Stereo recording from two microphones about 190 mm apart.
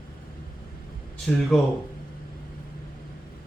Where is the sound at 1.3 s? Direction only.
5° left (ahead or behind).